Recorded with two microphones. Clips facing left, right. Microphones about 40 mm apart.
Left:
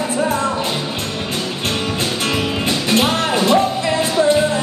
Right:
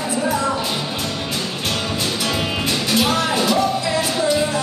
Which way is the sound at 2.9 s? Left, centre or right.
Left.